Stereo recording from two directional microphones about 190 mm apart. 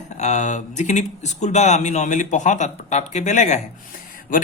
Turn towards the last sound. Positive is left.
turn(degrees=45)  # may be behind; listen again after turning